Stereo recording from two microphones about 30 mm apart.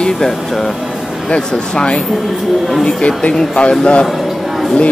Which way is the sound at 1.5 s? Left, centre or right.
Left.